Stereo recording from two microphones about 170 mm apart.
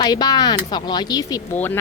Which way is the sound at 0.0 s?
25° left (ahead or behind).